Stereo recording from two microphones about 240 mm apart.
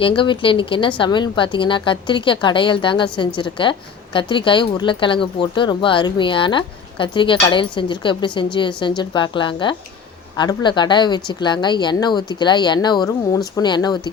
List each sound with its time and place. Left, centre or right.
0.2 s a woman's voice: left